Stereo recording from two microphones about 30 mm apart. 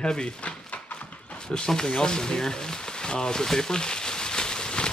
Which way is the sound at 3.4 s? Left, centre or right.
Centre.